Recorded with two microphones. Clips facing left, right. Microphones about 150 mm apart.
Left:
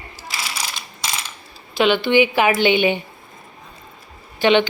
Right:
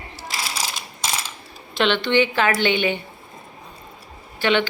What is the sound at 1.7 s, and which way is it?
A woman's voice, 5° left (ahead or behind).